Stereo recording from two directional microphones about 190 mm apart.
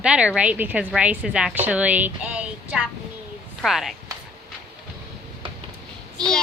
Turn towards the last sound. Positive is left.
turn(degrees=5)  # may be behind; listen again after turning